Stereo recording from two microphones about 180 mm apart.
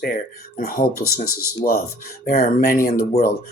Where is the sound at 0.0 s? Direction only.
55° left (ahead or behind).